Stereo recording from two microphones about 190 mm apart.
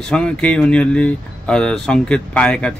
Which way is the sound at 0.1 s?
5° left (ahead or behind).